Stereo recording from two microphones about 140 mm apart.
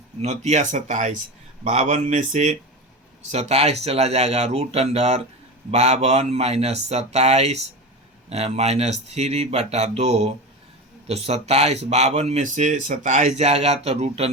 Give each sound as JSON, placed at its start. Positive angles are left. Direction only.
{"t": 0.2, "sound": "speech", "side_deg": -55}